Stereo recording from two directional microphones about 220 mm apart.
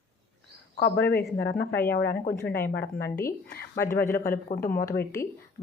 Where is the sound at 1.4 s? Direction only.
50° left (ahead or behind).